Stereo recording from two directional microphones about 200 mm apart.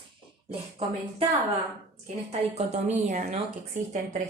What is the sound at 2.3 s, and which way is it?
A woman's voice, 35° right (ahead or behind).